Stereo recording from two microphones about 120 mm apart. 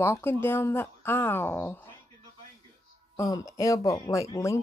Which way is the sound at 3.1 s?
30° left (ahead or behind).